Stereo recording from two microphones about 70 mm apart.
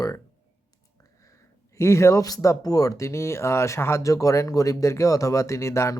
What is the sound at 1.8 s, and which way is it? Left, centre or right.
Speech, left.